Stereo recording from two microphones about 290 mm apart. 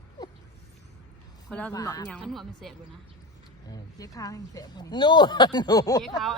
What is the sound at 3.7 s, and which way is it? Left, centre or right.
Speech, centre.